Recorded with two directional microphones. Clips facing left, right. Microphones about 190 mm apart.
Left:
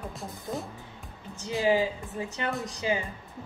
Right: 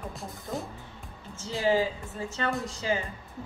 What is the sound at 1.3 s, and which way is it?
Speech, 15° left (ahead or behind).